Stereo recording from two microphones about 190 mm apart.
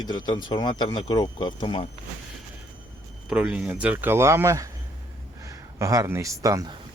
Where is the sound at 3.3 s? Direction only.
5° right (ahead or behind).